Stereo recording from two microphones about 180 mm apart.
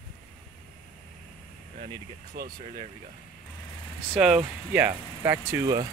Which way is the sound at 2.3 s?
60° right (ahead or behind).